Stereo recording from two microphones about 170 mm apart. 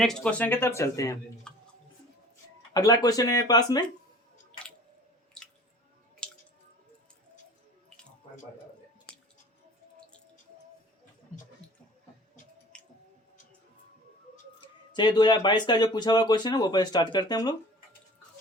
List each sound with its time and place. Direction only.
0.0 s speech: 5° left (ahead or behind)
1.5 s a sound: 5° left (ahead or behind)
2.7 s speech: 20° left (ahead or behind)
6.2 s squish: 5° left (ahead or behind)
11.6 s a sound: 5° left (ahead or behind)
14.6 s speech: 25° left (ahead or behind)